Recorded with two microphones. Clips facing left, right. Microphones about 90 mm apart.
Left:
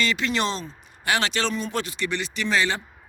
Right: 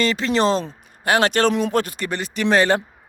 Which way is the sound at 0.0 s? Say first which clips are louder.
Right 6 dB; 40° right (ahead or behind).